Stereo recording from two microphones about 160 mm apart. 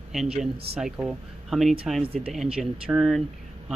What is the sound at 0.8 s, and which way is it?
Speech, 5° right (ahead or behind).